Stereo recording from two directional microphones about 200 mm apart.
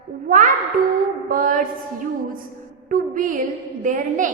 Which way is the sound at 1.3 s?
40° right (ahead or behind).